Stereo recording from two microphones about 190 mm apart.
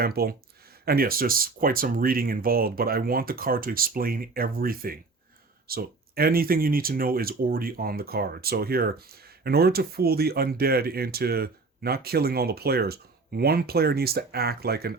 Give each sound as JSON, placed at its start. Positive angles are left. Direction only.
{"t": 0.0, "sound": "speech", "side_deg": -55}